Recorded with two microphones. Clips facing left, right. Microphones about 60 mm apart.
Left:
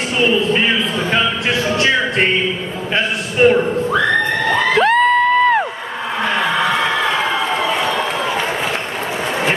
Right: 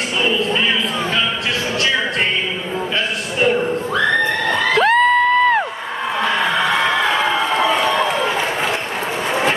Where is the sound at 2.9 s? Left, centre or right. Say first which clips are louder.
Left 7 dB; left.